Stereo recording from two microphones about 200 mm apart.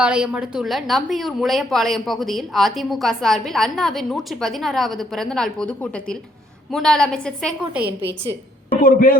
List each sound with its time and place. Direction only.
0.0 s a woman's voice: 5° right (ahead or behind)
8.8 s a man's voice: 45° left (ahead or behind)